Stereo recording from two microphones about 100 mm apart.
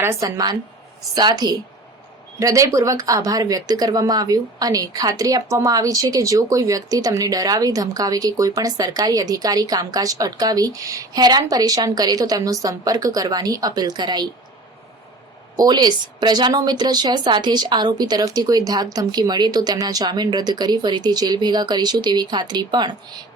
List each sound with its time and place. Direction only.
0.0 s a woman's voice: 25° right (ahead or behind)
0.3 s speech: 40° right (ahead or behind)
15.5 s speech: 45° right (ahead or behind)